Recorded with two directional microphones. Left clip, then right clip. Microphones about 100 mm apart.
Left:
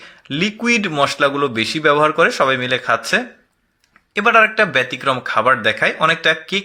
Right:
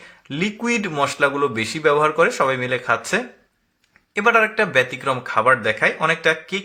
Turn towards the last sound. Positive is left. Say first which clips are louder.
# left 3 dB
turn(degrees=25)  # may be behind; listen again after turning